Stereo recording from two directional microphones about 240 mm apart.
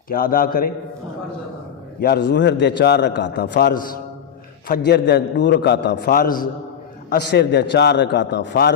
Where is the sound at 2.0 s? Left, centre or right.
Left.